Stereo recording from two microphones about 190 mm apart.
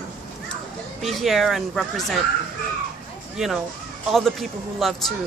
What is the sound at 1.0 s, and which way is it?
Speech, centre (ahead or behind).